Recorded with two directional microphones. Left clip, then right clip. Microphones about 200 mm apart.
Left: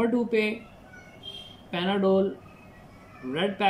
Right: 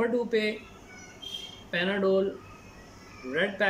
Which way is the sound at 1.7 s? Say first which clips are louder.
Left 1 dB; 45° left (ahead or behind).